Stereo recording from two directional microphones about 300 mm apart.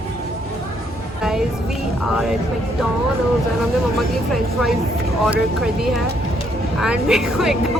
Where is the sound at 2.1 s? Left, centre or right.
Centre.